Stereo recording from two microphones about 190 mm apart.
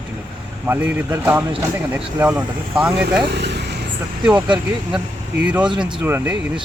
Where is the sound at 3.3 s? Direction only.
65° right (ahead or behind).